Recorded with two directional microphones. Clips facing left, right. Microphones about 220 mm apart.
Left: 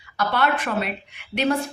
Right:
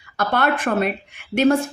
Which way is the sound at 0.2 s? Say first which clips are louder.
Right 2 dB; 50° right (ahead or behind).